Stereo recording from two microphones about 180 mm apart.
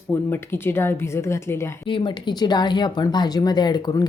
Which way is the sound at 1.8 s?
25° left (ahead or behind).